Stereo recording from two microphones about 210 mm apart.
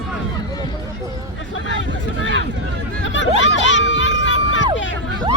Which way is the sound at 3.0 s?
60° left (ahead or behind).